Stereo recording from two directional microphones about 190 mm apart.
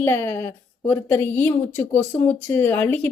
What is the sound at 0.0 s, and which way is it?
Speech, 15° left (ahead or behind).